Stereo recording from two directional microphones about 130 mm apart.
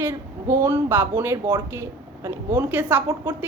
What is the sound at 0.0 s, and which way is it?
A woman's voice, 20° right (ahead or behind).